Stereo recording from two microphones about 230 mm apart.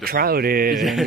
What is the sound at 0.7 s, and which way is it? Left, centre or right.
Speech, centre.